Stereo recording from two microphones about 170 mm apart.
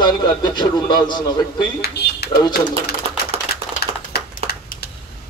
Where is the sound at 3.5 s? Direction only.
65° left (ahead or behind).